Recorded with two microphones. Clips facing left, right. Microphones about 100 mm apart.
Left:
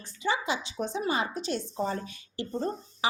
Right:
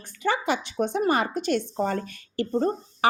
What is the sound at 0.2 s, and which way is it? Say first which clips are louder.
Speech: right 4 dB; 55° right (ahead or behind).